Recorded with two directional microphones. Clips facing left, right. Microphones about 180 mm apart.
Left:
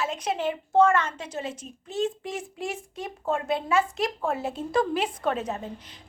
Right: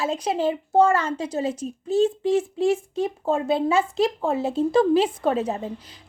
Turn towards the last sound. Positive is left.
turn(degrees=-30)  # may be behind; listen again after turning